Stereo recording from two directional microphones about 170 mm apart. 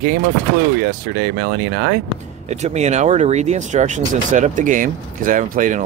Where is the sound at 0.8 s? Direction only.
60° right (ahead or behind).